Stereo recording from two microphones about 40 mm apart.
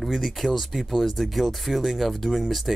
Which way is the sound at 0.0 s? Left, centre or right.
Centre.